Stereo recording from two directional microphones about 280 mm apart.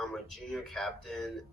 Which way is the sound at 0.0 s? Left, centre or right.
Centre.